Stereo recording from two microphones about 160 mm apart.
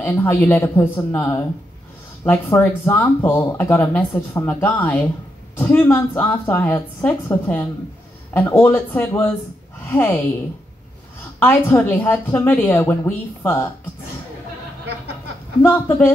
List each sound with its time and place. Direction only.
0.0 s a woman's voice: 15° left (ahead or behind)
11.3 s speech: 10° left (ahead or behind)
15.6 s speech: 15° left (ahead or behind)